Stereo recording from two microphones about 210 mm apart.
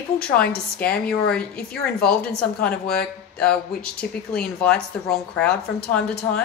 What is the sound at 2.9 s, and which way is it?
A woman's voice, 5° left (ahead or behind).